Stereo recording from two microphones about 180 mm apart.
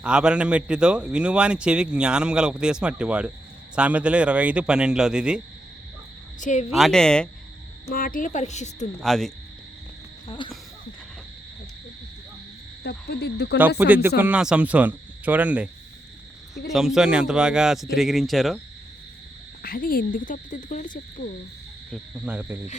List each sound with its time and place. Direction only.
0.0 s a man's voice: 5° right (ahead or behind)
6.4 s speech: 45° left (ahead or behind)
6.7 s a man's voice: centre (ahead or behind)
7.9 s speech: 50° left (ahead or behind)
9.0 s a man's voice: centre (ahead or behind)
10.2 s cricket: 30° left (ahead or behind)
12.8 s speech: 65° left (ahead or behind)
13.6 s a man's voice: 10° right (ahead or behind)
19.6 s speech: 55° left (ahead or behind)
21.8 s speech: centre (ahead or behind)